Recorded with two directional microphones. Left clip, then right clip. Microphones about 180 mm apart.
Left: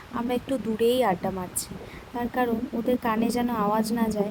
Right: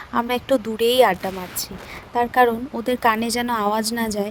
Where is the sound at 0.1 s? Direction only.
20° right (ahead or behind).